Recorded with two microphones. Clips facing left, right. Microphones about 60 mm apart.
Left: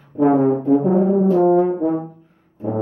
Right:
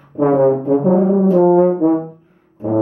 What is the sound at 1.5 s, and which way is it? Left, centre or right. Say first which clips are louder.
Brass instrument: right 4 dB; right.